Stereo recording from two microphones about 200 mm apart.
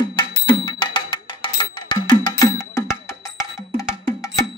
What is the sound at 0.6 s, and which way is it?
Music, 20° left (ahead or behind).